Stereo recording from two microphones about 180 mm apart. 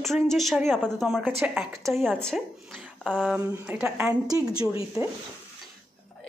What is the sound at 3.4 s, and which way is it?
A woman's voice, 15° right (ahead or behind).